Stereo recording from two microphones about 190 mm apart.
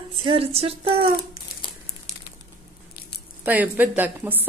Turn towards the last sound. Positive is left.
turn(degrees=-10)  # may be behind; listen again after turning